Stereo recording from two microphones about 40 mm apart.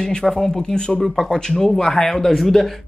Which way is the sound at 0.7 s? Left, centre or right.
Centre.